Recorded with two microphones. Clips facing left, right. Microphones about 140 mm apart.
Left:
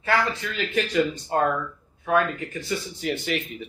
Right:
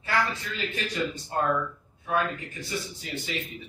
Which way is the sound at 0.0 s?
80° left.